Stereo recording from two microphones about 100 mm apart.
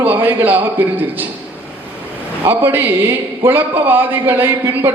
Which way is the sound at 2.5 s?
20° right (ahead or behind).